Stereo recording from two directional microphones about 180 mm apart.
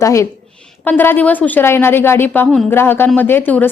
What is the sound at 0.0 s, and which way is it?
A woman's voice, 15° left (ahead or behind).